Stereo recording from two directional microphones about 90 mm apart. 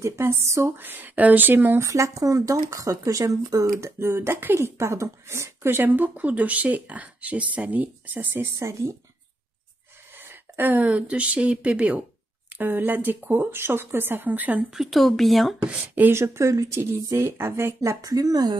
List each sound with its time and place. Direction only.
0.0 s speech: 30° right (ahead or behind)
1.9 s speech: 35° right (ahead or behind); by 8.5 s 20° right (ahead or behind)
8.5 s speech: 35° right (ahead or behind)
10.1 s speech: 25° right (ahead or behind)
14.7 s speech: centre (ahead or behind)
15.6 s speech: 20° right (ahead or behind); by 18.6 s 45° right (ahead or behind)